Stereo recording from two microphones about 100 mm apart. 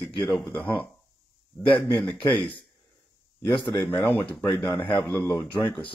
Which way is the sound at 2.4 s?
15° left (ahead or behind).